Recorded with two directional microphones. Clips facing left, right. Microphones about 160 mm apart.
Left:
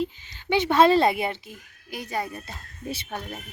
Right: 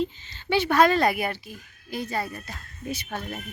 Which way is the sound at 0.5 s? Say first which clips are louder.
Left 2 dB; 20° left (ahead or behind).